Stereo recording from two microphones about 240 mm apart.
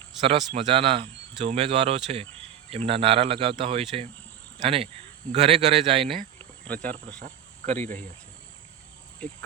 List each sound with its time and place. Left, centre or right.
0.2 s speech: right
6.4 s insect: centre
7.2 s cricket: right
9.2 s cricket: centre